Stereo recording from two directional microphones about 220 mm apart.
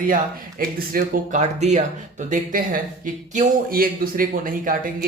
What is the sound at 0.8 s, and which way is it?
Speech, 40° right (ahead or behind).